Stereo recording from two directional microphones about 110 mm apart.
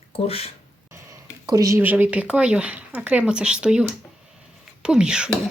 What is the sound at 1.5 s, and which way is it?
Speech, 30° right (ahead or behind).